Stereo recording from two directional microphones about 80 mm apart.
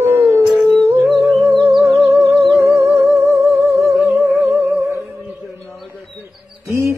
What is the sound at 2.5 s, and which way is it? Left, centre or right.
Music, right.